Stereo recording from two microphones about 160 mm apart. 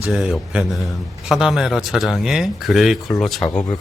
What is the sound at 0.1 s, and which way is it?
A man's voice, 5° right (ahead or behind).